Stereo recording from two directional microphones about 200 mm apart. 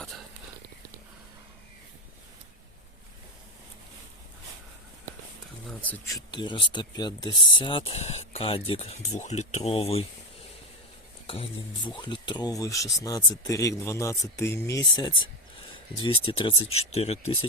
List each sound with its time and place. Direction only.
0.0 s whispering: centre (ahead or behind)
5.6 s speech: 10° left (ahead or behind); by 10.0 s 30° left (ahead or behind)
11.9 s speech: 20° left (ahead or behind)